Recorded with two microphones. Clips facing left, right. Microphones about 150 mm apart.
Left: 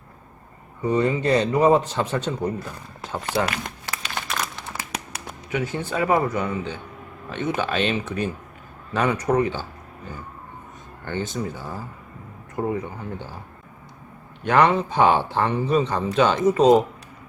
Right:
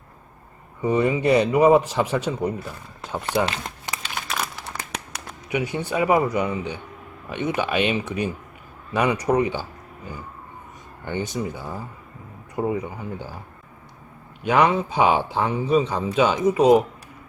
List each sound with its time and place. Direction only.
0.9 s speech: 10° right (ahead or behind)
3.4 s a sound: 25° right (ahead or behind)
5.5 s speech: 15° right (ahead or behind)
11.0 s speech: 15° right (ahead or behind)
14.4 s speech: 10° right (ahead or behind)